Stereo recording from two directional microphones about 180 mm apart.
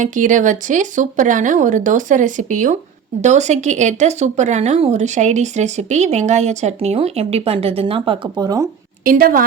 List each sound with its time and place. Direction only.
0.0 s speech: 45° right (ahead or behind); by 8.7 s 20° right (ahead or behind)
9.0 s speech: 50° right (ahead or behind)